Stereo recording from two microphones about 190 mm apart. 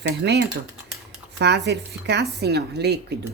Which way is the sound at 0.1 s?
60° right (ahead or behind).